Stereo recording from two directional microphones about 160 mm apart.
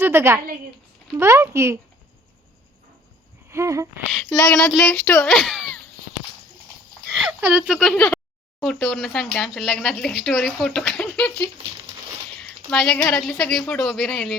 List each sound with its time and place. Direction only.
0.0 s a woman's voice: 15° right (ahead or behind)
3.5 s speech: 20° right (ahead or behind)
4.4 s speech: 10° left (ahead or behind)
7.1 s a sound: centre (ahead or behind)
7.4 s speech: 10° right (ahead or behind)
7.7 s a woman's voice: 5° left (ahead or behind)
12.4 s a woman's voice: 5° left (ahead or behind)